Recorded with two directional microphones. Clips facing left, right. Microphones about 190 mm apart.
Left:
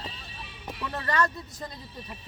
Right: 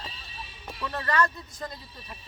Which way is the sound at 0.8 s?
20° left (ahead or behind).